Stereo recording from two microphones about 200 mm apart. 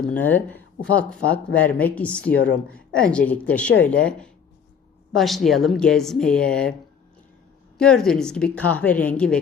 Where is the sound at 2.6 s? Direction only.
5° left (ahead or behind).